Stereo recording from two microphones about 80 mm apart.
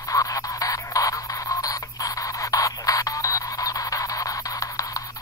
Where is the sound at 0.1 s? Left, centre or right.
Left.